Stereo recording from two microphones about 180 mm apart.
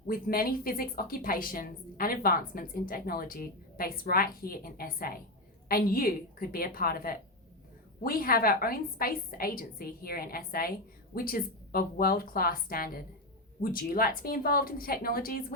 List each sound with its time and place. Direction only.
0.1 s a woman's voice: 55° left (ahead or behind)